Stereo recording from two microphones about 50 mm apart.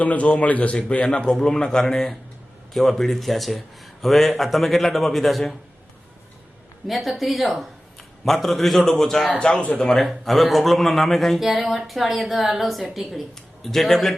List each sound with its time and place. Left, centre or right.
0.0 s a man's voice: left
1.3 s a man's voice: centre
6.8 s speech: centre
9.7 s a man's voice: centre
10.0 s speech: centre